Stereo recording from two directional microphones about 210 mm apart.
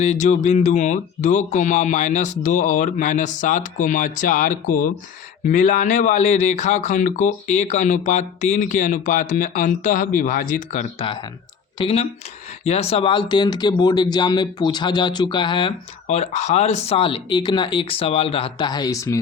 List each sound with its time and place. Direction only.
0.0 s speech: 35° left (ahead or behind); by 19.2 s 15° left (ahead or behind)